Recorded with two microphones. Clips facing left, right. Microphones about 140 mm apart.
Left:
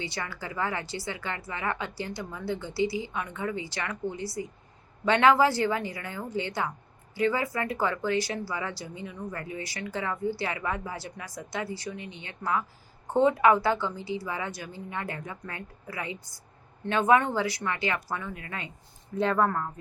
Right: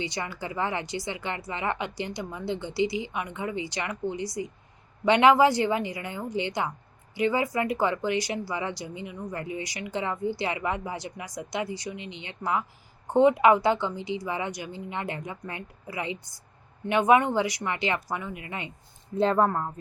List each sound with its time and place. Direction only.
0.0 s speech: 20° right (ahead or behind)
19.1 s speech: 30° right (ahead or behind)